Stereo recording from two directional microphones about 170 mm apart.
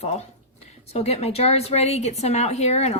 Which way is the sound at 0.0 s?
40° left (ahead or behind).